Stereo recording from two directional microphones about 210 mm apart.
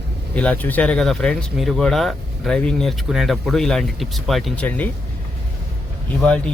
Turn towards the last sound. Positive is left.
turn(degrees=5)  # may be behind; listen again after turning